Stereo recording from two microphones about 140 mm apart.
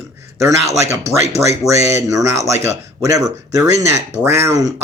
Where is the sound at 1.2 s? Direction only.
50° right (ahead or behind).